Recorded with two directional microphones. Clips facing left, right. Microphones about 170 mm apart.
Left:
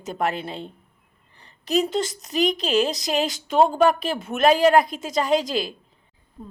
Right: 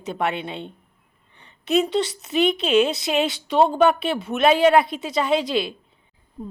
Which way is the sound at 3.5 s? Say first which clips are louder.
Even; centre (ahead or behind).